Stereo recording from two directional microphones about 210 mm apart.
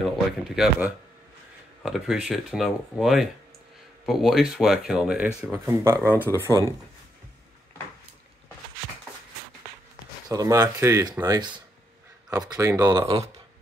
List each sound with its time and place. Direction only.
0.0 s speech: centre (ahead or behind)
10.2 s speech: 15° right (ahead or behind)
13.0 s speech: 30° right (ahead or behind)